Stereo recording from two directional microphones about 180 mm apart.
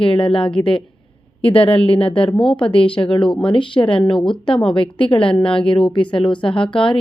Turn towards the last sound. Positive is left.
turn(degrees=30)  # may be behind; listen again after turning